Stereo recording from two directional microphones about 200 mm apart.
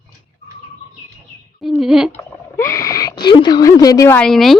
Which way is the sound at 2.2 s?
15° left (ahead or behind).